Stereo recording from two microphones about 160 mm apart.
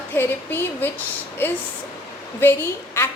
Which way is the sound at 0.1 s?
15° left (ahead or behind).